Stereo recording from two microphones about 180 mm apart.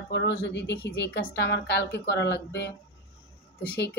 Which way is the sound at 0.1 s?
75° left (ahead or behind).